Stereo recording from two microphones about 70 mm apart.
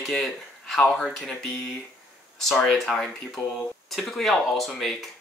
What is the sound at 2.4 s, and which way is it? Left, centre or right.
Speech, centre.